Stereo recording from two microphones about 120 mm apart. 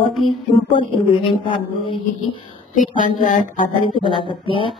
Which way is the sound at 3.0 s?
90° left.